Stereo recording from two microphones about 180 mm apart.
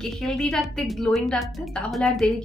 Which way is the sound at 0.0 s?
5° left (ahead or behind).